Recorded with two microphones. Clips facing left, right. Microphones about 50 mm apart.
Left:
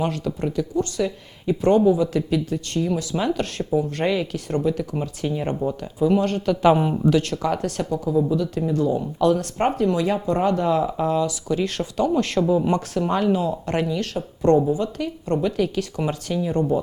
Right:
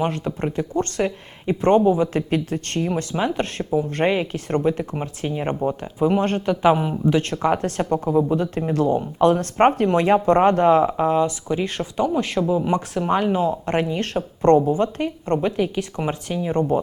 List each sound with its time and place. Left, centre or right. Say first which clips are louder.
0.0 s speech: right 1 dB; right
0.8 s speech: right 3 dB; right
3.2 s speech: right 1 dB; right
7.1 s speech: right 4 dB; right
9.0 s speech: right 2 dB; right
12.0 s speech: left 1 dB; centre; by 15.5 s right
15.5 s speech: even; right
16.6 s speech: right 2 dB; right